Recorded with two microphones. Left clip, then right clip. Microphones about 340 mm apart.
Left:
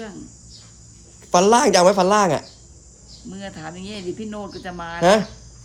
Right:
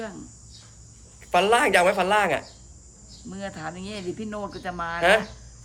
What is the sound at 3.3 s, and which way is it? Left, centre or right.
Speech, centre.